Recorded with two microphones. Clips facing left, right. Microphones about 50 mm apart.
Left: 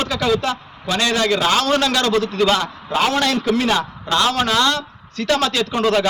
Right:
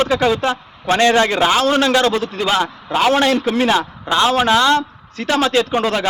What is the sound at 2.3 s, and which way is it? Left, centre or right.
Speech, centre.